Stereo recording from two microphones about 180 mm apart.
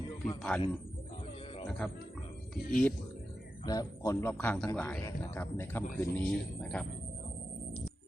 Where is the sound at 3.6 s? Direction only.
20° left (ahead or behind).